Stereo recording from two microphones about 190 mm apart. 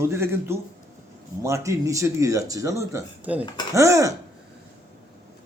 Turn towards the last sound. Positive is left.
turn(degrees=-15)  # may be behind; listen again after turning